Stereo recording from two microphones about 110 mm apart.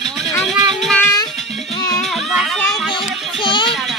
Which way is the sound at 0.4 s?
Centre (ahead or behind).